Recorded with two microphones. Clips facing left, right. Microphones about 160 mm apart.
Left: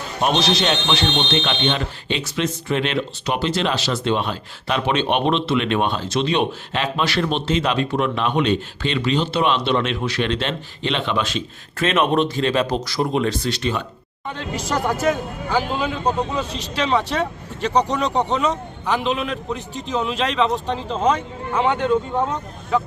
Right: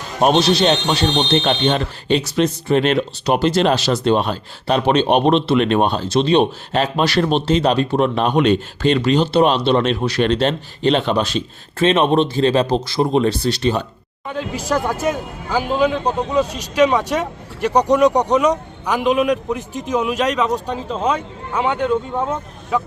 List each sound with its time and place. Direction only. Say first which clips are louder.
0.2 s speech: right 5 dB; 40° right (ahead or behind)
14.3 s speech: right 4 dB; 10° right (ahead or behind)
16.6 s speech: right 3 dB; 10° right (ahead or behind)